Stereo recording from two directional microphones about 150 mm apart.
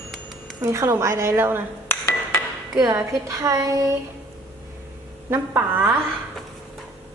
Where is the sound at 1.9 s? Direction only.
20° left (ahead or behind).